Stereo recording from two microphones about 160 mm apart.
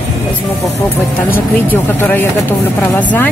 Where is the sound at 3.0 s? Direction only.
10° left (ahead or behind).